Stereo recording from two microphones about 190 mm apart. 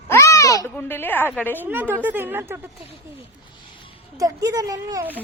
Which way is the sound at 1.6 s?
10° right (ahead or behind).